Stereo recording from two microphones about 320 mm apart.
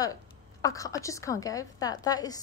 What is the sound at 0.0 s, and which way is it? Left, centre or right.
A woman's voice, centre.